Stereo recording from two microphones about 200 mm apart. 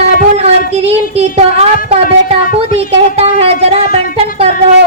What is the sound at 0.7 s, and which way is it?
Speech, 30° right (ahead or behind).